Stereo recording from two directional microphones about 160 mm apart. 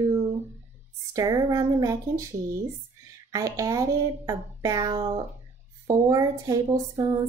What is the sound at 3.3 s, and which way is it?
Speech, 20° right (ahead or behind).